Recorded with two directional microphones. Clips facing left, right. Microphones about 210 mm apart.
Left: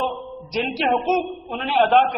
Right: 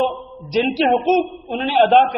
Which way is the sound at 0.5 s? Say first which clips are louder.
Right 6 dB; 30° right (ahead or behind).